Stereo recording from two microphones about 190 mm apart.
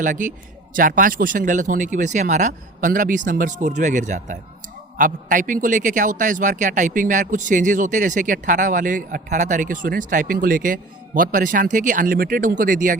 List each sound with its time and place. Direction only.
0.0 s a man's voice: 40° right (ahead or behind)